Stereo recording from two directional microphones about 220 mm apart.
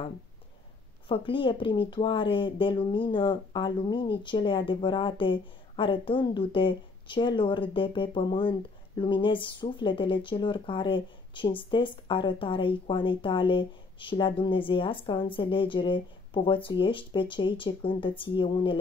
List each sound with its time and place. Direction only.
1.0 s speech: 25° left (ahead or behind)